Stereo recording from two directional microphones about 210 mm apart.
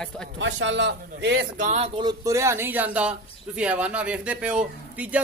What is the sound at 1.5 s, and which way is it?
A man's voice, 35° right (ahead or behind).